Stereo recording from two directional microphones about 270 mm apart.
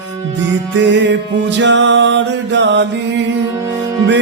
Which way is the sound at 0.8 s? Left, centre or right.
Right.